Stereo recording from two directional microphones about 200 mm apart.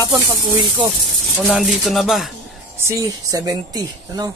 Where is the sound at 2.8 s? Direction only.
15° right (ahead or behind).